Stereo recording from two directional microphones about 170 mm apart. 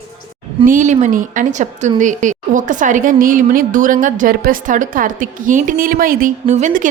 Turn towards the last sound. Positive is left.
turn(degrees=-50)  # may be behind; listen again after turning